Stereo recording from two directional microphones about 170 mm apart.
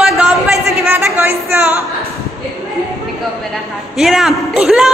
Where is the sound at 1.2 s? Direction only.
10° right (ahead or behind).